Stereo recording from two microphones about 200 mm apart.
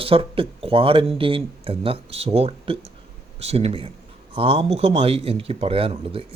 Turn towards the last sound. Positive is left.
turn(degrees=-25)  # may be behind; listen again after turning